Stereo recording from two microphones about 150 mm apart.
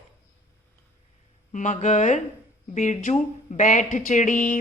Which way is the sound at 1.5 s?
55° left (ahead or behind).